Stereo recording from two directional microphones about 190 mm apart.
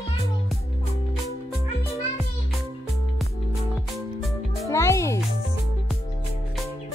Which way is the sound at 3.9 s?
Centre (ahead or behind).